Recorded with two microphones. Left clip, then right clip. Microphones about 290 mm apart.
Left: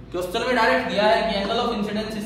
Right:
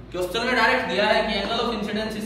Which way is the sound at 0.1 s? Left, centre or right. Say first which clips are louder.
Even; centre.